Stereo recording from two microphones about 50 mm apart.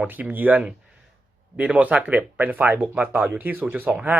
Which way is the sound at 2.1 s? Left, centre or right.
Right.